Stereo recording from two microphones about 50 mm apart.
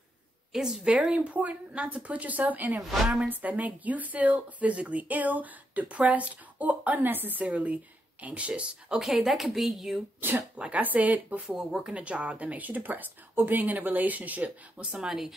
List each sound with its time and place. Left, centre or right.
0.5 s a woman's voice: centre; by 7.4 s right
7.4 s speech: right
9.0 s a woman's voice: centre
10.2 s speech: right
11.4 s speech: centre
15.0 s speech: centre